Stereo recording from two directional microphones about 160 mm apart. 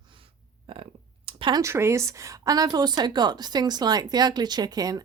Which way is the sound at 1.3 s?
30° right (ahead or behind).